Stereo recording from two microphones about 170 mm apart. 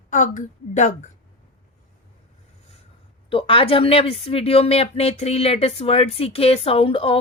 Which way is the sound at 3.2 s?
30° left (ahead or behind).